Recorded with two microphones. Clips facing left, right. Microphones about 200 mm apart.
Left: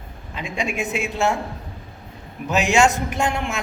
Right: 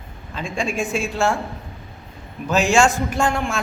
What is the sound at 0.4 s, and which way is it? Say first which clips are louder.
A woman's voice: right 2 dB; 20° left (ahead or behind).